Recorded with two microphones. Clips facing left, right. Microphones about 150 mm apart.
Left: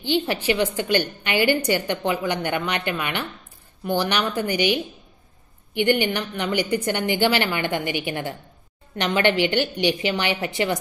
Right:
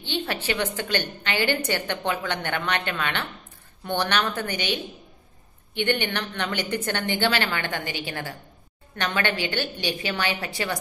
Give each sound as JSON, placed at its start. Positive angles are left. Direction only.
{"t": 0.0, "sound": "a woman's voice", "side_deg": 15}
{"t": 5.8, "sound": "a woman's voice", "side_deg": 10}